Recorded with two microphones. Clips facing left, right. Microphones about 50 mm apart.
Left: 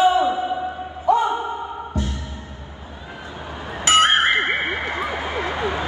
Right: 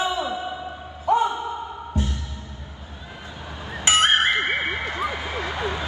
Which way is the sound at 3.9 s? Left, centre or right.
Left.